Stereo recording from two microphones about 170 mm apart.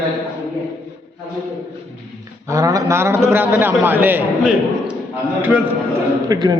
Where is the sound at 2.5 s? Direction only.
20° right (ahead or behind).